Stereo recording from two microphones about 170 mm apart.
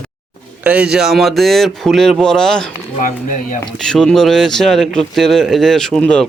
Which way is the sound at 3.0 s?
50° left (ahead or behind).